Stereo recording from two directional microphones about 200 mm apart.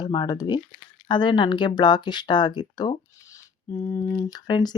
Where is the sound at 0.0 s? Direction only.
20° left (ahead or behind).